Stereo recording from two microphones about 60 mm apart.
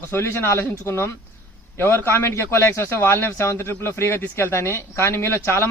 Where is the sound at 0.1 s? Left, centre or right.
Left.